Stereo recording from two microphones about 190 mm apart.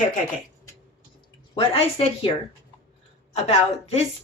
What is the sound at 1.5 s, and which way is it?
Speech, 30° left (ahead or behind).